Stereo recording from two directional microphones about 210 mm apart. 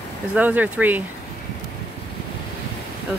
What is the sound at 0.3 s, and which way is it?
Speech, 5° right (ahead or behind).